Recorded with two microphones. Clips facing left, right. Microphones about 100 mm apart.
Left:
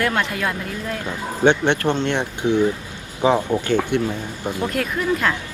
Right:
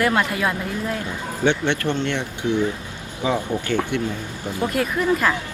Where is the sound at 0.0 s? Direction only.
5° right (ahead or behind).